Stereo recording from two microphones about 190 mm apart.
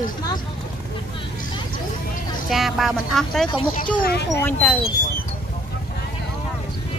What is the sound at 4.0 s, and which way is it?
Speech, 60° left (ahead or behind).